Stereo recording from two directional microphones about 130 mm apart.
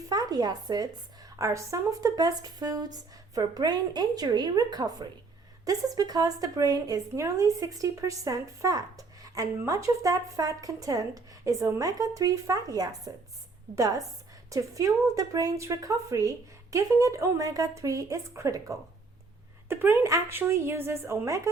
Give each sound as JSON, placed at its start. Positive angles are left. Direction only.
{"t": 0.1, "sound": "speech", "side_deg": -30}